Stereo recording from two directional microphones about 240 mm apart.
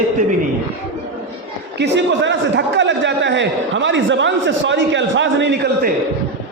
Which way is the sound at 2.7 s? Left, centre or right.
Right.